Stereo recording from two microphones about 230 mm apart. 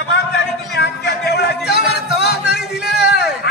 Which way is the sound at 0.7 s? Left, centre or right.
Left.